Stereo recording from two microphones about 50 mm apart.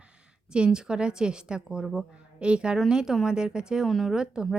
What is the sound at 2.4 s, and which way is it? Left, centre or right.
A woman's voice, right.